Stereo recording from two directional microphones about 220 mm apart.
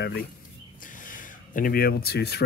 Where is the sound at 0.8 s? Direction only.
40° left (ahead or behind).